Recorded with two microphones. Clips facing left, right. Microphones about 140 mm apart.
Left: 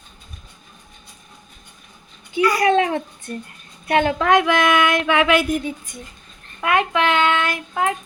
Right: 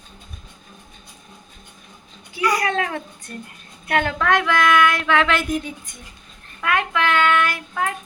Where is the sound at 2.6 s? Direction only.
25° left (ahead or behind).